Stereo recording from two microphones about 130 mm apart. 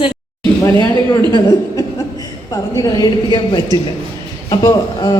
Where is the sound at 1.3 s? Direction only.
35° left (ahead or behind).